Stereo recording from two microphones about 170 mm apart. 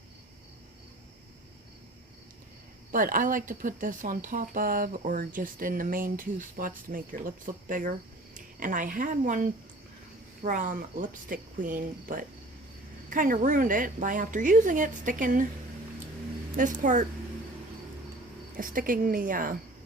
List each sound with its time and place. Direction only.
2.9 s speech: 55° right (ahead or behind)
16.6 s speech: 50° right (ahead or behind)
18.5 s speech: 55° right (ahead or behind)